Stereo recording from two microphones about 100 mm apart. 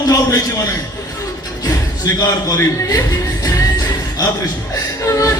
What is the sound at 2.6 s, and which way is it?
Speech, 30° left (ahead or behind).